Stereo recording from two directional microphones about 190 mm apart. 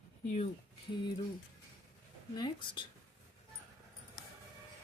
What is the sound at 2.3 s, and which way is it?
Speech, 20° left (ahead or behind).